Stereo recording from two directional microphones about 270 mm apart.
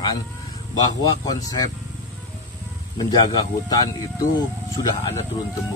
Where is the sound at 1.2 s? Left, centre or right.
Centre.